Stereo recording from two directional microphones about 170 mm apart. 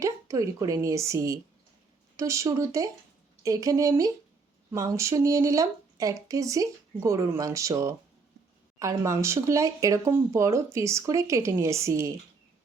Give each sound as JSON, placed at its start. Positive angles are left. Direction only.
{"t": 0.0, "sound": "a woman's voice", "side_deg": -20}